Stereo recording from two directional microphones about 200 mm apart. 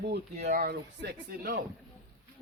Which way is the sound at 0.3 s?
40° right (ahead or behind).